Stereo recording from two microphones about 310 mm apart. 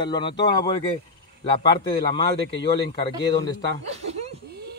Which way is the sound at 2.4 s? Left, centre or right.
Left.